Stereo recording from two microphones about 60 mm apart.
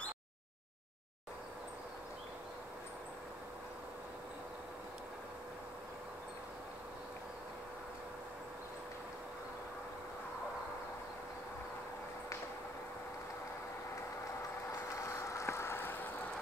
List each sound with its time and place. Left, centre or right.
14.7 s vehicle: left